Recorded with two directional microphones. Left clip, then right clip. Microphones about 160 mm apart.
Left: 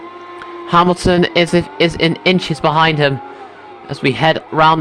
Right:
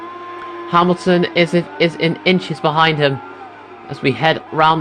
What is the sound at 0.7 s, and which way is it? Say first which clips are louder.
A man's voice: left 2 dB; 35° left (ahead or behind).